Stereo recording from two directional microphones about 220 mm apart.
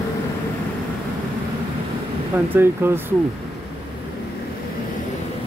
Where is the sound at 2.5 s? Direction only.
10° right (ahead or behind).